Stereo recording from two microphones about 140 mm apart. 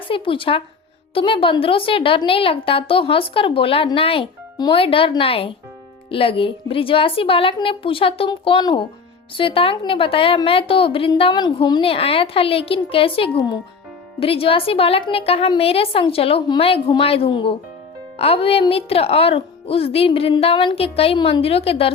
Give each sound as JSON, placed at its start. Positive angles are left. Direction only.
{"t": 0.1, "sound": "a woman's voice", "side_deg": 40}